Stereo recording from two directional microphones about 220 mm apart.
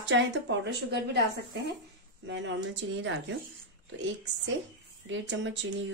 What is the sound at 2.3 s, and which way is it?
A woman's voice, 55° right (ahead or behind).